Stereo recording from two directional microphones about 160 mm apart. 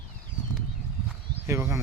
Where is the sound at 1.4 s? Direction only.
15° right (ahead or behind).